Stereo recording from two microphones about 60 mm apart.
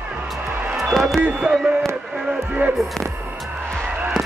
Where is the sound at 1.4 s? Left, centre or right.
Centre.